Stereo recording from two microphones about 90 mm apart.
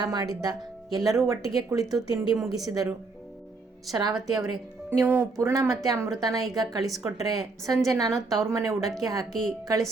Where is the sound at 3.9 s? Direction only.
45° right (ahead or behind).